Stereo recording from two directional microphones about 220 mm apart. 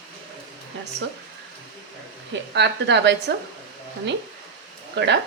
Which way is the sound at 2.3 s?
50° right (ahead or behind).